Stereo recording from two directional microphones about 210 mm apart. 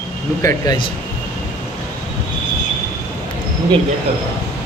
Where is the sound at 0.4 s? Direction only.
20° left (ahead or behind).